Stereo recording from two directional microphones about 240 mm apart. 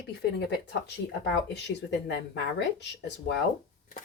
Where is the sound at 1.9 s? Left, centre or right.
Left.